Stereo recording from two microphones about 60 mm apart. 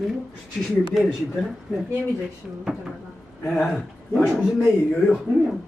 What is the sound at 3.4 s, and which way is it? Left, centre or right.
Speech, centre.